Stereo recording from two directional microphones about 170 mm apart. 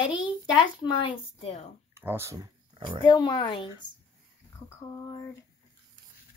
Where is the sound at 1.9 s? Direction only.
15° right (ahead or behind).